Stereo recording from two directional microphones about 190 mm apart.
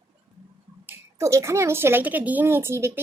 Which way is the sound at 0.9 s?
15° right (ahead or behind).